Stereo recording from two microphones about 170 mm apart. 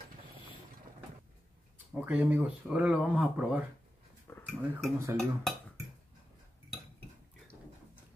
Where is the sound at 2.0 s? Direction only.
10° right (ahead or behind).